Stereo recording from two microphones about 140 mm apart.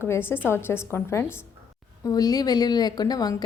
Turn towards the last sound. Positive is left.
turn(degrees=30)  # may be behind; listen again after turning